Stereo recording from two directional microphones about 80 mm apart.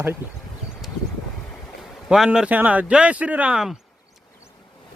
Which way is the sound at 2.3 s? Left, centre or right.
Centre.